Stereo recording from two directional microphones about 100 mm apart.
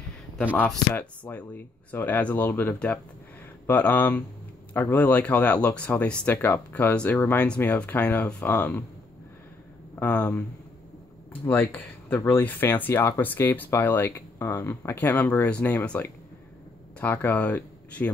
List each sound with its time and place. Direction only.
0.9 s speech: 15° left (ahead or behind)
9.9 s speech: 15° left (ahead or behind)
11.4 s speech: 15° left (ahead or behind)